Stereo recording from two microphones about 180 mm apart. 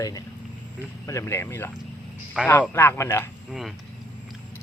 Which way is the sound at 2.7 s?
15° left (ahead or behind).